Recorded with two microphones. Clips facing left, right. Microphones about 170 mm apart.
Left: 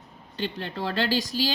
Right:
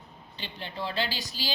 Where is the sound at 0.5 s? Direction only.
90° left.